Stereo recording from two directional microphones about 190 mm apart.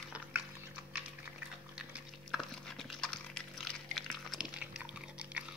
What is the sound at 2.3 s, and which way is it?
Dog, centre (ahead or behind).